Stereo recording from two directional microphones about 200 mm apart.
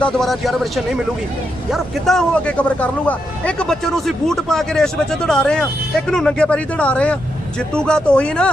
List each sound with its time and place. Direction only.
0.0 s speech: centre (ahead or behind)
1.7 s speech: centre (ahead or behind)